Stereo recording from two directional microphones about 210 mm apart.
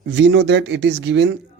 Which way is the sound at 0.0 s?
55° right (ahead or behind).